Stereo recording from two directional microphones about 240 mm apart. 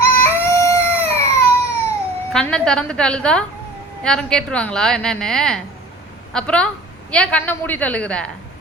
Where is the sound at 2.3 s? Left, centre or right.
Centre.